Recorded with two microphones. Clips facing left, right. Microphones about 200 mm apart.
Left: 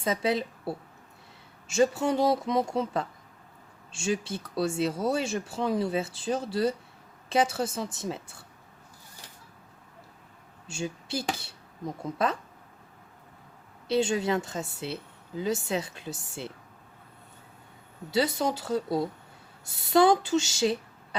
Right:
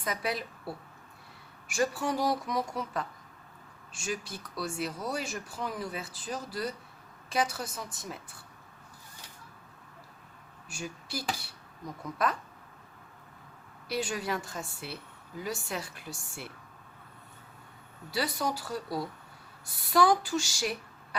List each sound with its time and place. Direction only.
0.0 s a woman's voice: 25° left (ahead or behind)
10.7 s speech: 25° left (ahead or behind)
13.8 s speech: 25° left (ahead or behind)
18.1 s speech: 25° left (ahead or behind)